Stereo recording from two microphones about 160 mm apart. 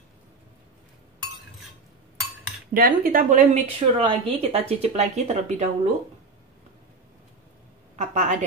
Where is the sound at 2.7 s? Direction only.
65° right (ahead or behind).